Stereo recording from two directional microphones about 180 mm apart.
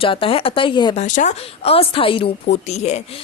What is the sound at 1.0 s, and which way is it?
A woman's voice, 40° left (ahead or behind).